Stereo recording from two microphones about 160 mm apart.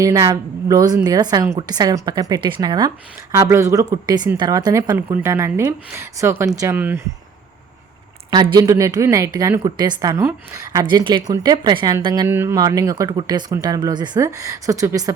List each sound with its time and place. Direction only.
0.0 s a woman's voice: 20° right (ahead or behind)
8.5 s a woman's voice: 20° right (ahead or behind)
12.3 s speech: 15° right (ahead or behind)
12.5 s a woman's voice: 25° right (ahead or behind)